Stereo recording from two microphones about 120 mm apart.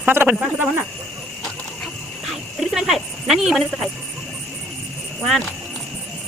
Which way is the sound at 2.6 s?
Centre (ahead or behind).